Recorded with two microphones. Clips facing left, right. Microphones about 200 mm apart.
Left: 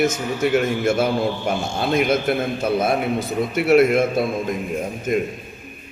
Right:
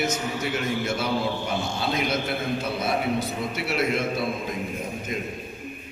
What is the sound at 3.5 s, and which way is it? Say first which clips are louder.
A man's voice: left 12 dB; 50° left (ahead or behind).